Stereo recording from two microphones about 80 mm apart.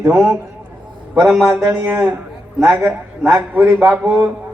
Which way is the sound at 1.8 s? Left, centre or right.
Centre.